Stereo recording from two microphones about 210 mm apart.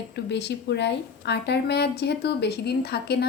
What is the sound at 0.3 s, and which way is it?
A woman's voice, 55° left (ahead or behind).